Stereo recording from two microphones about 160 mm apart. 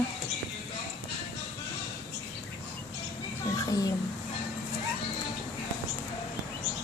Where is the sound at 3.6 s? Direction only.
25° left (ahead or behind).